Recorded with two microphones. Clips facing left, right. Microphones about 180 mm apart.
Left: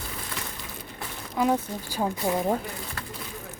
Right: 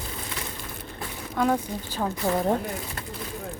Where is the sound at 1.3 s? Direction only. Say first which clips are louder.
Even; 5° left (ahead or behind).